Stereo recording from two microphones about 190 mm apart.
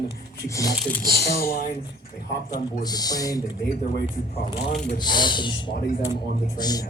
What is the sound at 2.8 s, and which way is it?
Speech, 20° left (ahead or behind).